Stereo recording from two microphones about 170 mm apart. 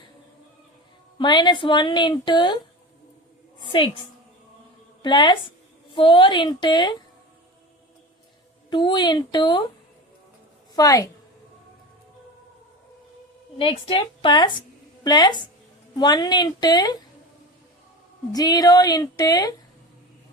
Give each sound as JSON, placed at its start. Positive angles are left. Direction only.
{"t": 1.2, "sound": "a woman's voice", "side_deg": 25}
{"t": 3.6, "sound": "a woman's voice", "side_deg": 30}
{"t": 5.0, "sound": "a woman's voice", "side_deg": 25}
{"t": 8.7, "sound": "a woman's voice", "side_deg": 30}
{"t": 10.8, "sound": "a woman's voice", "side_deg": 20}
{"t": 13.6, "sound": "a woman's voice", "side_deg": 30}
{"t": 18.3, "sound": "a woman's voice", "side_deg": 25}